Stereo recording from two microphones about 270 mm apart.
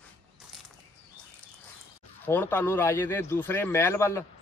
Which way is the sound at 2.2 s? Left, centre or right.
Centre.